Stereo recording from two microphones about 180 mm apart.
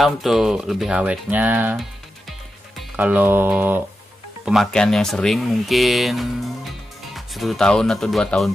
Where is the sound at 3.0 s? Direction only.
10° right (ahead or behind).